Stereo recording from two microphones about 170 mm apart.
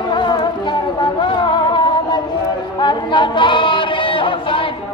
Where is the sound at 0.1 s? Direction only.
25° left (ahead or behind).